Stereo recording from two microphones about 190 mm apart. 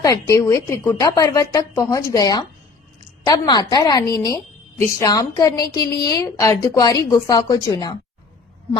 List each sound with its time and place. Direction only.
0.0 s a woman's voice: 15° left (ahead or behind)